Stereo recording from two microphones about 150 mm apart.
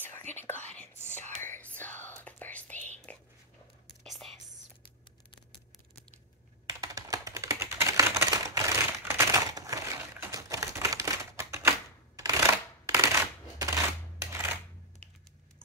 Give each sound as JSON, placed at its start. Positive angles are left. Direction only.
{"t": 0.0, "sound": "whispering", "side_deg": 15}
{"t": 6.7, "sound": "typing", "side_deg": -25}
{"t": 10.2, "sound": "typewriter", "side_deg": -20}
{"t": 12.2, "sound": "shuffling cards", "side_deg": -20}